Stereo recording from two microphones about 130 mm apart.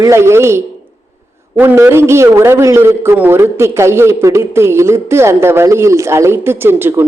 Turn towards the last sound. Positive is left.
turn(degrees=-15)  # may be behind; listen again after turning